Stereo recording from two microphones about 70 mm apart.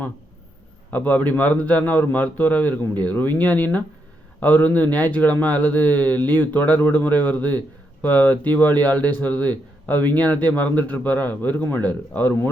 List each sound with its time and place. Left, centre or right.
0.9 s speech: left